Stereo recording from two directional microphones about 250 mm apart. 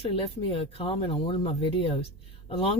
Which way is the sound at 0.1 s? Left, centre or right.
Left.